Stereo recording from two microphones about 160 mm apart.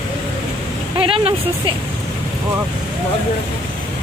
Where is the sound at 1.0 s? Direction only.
35° right (ahead or behind).